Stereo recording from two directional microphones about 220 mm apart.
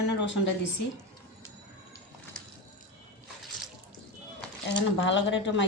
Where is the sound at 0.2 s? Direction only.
55° left (ahead or behind).